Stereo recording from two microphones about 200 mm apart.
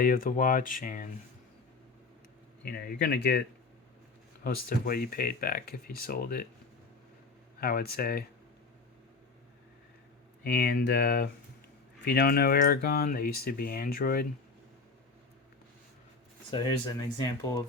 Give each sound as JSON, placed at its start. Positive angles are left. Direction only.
{"t": 0.0, "sound": "speech", "side_deg": 45}
{"t": 2.6, "sound": "speech", "side_deg": 50}
{"t": 4.4, "sound": "speech", "side_deg": 45}
{"t": 7.6, "sound": "speech", "side_deg": 50}
{"t": 10.4, "sound": "speech", "side_deg": 50}
{"t": 16.5, "sound": "speech", "side_deg": 20}